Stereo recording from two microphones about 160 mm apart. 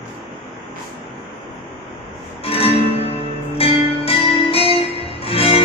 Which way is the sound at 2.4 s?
35° left (ahead or behind).